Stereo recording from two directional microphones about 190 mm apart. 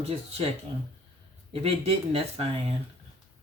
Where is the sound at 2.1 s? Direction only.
30° right (ahead or behind).